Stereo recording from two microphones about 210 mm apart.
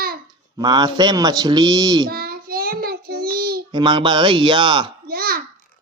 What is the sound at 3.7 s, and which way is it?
A man's voice, 20° right (ahead or behind).